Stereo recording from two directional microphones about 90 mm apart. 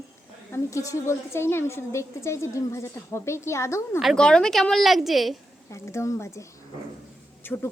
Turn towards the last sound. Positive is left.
turn(degrees=20)  # may be behind; listen again after turning